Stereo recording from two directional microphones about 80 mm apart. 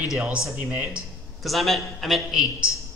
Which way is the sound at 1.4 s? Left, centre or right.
Centre.